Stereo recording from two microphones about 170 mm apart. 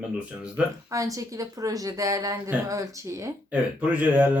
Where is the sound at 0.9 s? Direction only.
20° right (ahead or behind).